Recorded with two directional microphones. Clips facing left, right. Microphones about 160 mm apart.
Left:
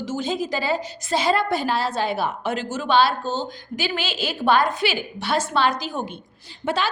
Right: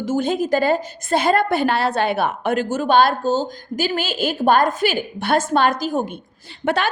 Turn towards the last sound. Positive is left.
turn(degrees=-60)  # may be behind; listen again after turning